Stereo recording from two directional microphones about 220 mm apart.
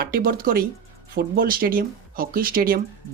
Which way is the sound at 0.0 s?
40° right (ahead or behind).